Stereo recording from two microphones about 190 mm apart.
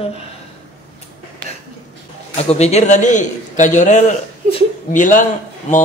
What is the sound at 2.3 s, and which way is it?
Speech, 35° left (ahead or behind).